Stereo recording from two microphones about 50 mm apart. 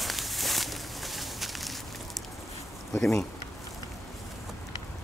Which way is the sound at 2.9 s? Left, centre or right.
Centre.